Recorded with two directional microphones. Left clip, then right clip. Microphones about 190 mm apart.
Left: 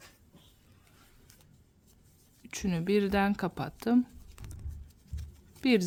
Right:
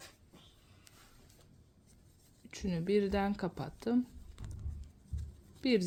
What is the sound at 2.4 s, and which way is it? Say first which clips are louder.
Speech: left 4 dB; 30° left (ahead or behind).